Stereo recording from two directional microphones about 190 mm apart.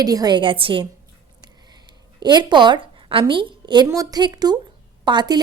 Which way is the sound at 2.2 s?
20° right (ahead or behind).